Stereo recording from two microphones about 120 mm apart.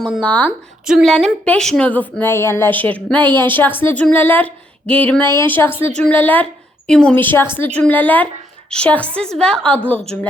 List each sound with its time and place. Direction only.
0.2 s a woman's voice: 10° left (ahead or behind)
0.9 s a sound: 5° right (ahead or behind)
1.1 s a woman's voice: 5° left (ahead or behind)